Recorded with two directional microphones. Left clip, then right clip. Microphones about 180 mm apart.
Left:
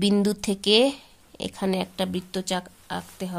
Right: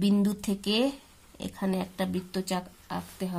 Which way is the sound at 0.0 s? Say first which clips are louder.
Left 5 dB; 40° left (ahead or behind).